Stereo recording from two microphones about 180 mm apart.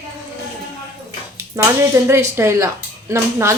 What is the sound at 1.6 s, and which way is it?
Speech, 20° right (ahead or behind).